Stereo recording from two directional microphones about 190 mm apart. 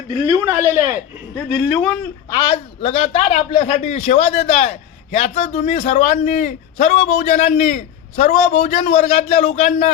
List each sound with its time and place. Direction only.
0.3 s a man's voice: 15° right (ahead or behind)
1.5 s speech: 5° left (ahead or behind)
2.3 s speech: 25° left (ahead or behind)